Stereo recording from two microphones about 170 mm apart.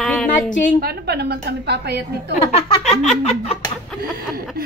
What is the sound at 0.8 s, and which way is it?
A woman's voice, 70° right (ahead or behind).